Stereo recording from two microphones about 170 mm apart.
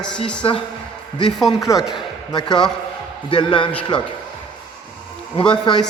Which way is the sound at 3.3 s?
30° left (ahead or behind).